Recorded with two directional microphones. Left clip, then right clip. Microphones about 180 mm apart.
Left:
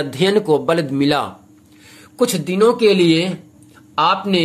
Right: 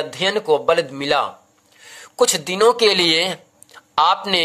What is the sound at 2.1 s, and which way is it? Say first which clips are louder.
Speech: right 1 dB; 35° right (ahead or behind).